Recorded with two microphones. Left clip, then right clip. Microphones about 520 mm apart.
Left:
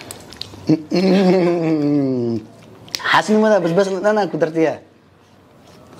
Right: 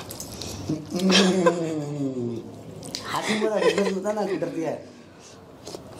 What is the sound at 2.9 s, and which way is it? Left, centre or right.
Speech, left.